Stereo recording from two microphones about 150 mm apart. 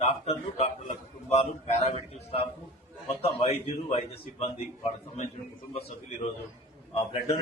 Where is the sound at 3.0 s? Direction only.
40° left (ahead or behind).